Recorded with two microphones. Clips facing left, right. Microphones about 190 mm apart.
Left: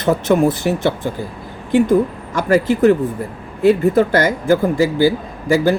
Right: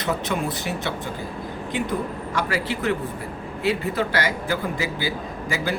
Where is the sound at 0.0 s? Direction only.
50° left (ahead or behind).